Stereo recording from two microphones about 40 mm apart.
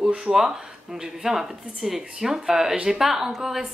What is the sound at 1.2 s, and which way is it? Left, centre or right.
Speech, centre.